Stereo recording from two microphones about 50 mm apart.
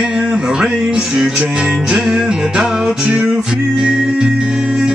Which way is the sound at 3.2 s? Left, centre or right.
Centre.